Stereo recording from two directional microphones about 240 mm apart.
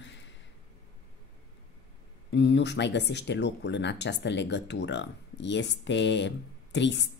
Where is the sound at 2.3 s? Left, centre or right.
Left.